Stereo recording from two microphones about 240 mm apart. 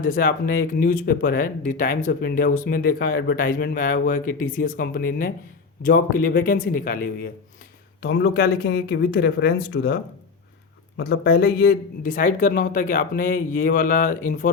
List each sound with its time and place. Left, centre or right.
0.0 s speech: left